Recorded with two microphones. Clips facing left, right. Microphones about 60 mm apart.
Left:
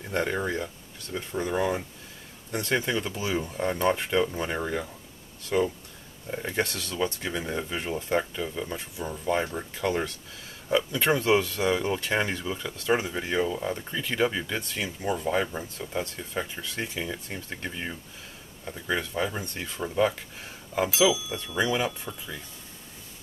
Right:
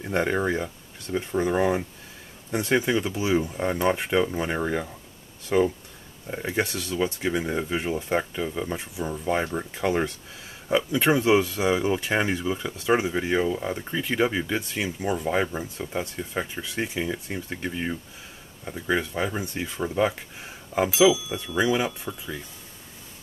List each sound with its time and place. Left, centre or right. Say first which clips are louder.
0.0 s speech: right 4 dB; right
6.2 s speech: right 2 dB; centre
20.9 s speech: right 5 dB; centre